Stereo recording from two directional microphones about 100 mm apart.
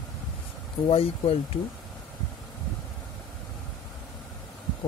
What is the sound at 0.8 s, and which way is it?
Speech, 65° left (ahead or behind).